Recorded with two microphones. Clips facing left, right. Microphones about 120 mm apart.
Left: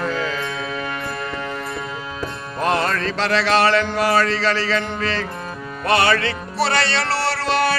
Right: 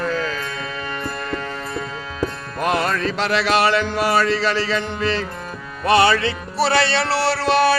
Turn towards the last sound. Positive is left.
turn(degrees=-15)  # may be behind; listen again after turning